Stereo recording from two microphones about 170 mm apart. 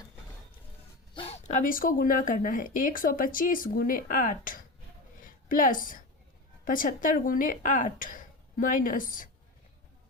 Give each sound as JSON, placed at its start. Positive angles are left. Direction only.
{"t": 1.1, "sound": "speech", "side_deg": 35}
{"t": 5.2, "sound": "a sound", "side_deg": 55}
{"t": 6.7, "sound": "speech", "side_deg": 50}